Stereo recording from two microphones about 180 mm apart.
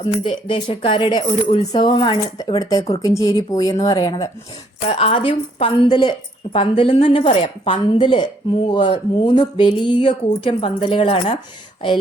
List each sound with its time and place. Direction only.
0.2 s speech: 30° left (ahead or behind)